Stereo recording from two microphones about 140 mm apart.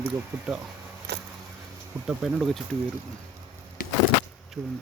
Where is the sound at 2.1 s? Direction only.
5° right (ahead or behind).